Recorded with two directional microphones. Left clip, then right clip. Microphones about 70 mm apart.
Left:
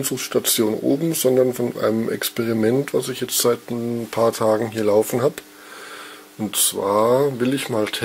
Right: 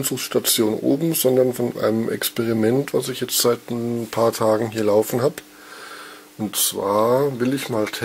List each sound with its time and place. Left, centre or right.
0.0 s speech: centre
1.1 s speech: centre
6.4 s speech: centre